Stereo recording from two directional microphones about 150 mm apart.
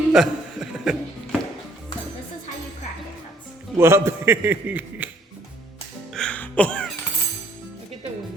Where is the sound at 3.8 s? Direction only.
15° right (ahead or behind).